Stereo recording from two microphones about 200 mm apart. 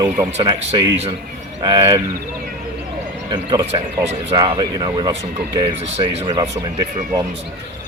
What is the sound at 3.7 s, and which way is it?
Speech, 30° right (ahead or behind).